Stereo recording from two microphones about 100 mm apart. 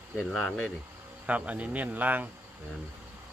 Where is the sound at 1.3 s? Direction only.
15° right (ahead or behind).